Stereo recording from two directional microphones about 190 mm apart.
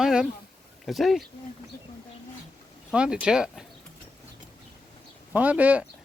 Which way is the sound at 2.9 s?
5° right (ahead or behind).